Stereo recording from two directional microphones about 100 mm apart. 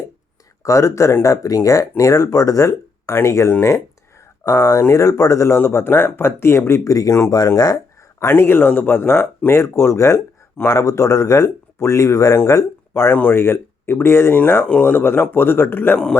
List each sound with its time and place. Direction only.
0.6 s speech: 30° left (ahead or behind)
8.2 s speech: 25° left (ahead or behind)